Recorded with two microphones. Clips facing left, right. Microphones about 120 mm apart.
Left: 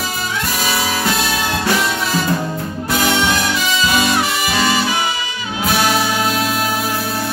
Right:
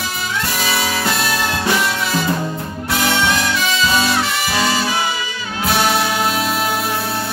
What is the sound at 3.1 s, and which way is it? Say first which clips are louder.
Music: right 1 dB; 15° left (ahead or behind).